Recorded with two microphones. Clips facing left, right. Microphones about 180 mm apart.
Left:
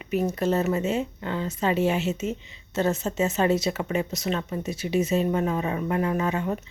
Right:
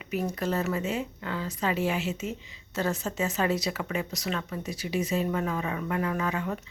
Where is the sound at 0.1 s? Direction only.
25° left (ahead or behind).